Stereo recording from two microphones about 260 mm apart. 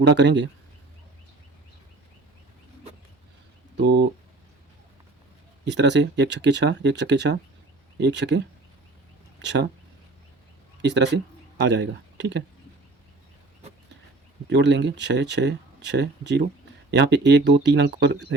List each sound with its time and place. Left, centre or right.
0.0 s speech: right
3.8 s speech: right
5.6 s speech: right
9.4 s speech: right
10.8 s a man's voice: right
14.5 s speech: right